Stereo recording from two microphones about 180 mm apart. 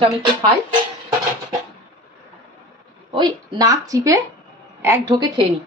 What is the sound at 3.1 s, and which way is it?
A woman's voice, 25° right (ahead or behind).